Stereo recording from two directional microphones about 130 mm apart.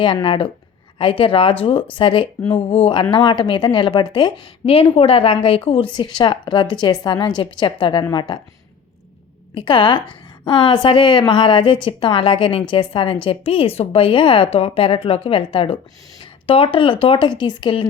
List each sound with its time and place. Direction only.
0.0 s a woman's voice: 35° left (ahead or behind)
9.6 s a woman's voice: 40° left (ahead or behind)